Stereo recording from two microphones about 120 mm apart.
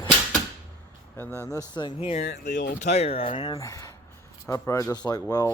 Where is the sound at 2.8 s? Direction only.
65° left (ahead or behind); by 3.5 s 50° left (ahead or behind).